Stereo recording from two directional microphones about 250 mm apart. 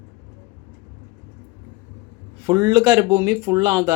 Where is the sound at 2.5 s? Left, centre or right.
Centre.